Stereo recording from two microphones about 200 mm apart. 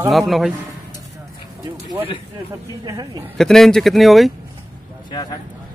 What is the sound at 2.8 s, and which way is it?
Speech, 20° right (ahead or behind).